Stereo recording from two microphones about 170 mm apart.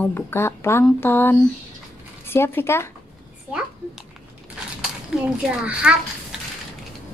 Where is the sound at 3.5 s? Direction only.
5° right (ahead or behind).